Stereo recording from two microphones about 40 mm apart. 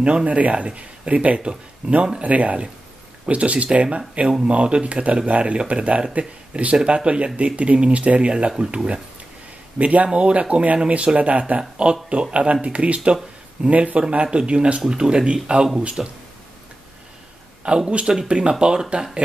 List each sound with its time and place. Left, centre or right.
0.0 s speech: right
9.8 s speech: right
10.5 s speech: right
11.7 s speech: right
16.0 s speech: centre
17.6 s speech: right